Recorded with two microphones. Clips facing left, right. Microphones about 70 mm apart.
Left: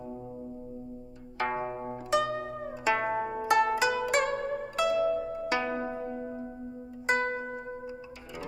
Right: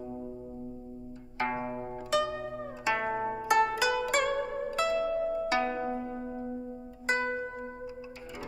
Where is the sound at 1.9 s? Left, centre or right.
Left.